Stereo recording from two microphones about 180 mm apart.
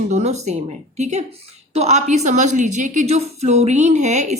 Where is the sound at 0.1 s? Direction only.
35° right (ahead or behind).